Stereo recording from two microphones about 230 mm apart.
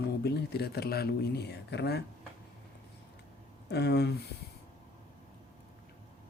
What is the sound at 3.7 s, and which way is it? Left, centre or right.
Speech, left.